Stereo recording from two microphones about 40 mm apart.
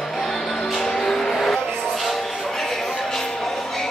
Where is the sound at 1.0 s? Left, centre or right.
Centre.